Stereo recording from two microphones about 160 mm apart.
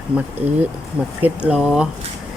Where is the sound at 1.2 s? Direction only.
10° right (ahead or behind).